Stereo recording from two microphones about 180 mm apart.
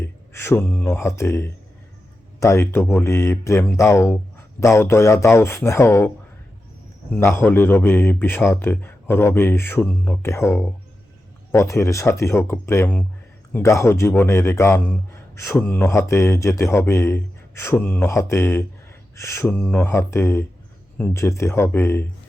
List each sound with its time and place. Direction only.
0.0 s a man's voice: 15° left (ahead or behind)
7.1 s a man's voice: 10° left (ahead or behind)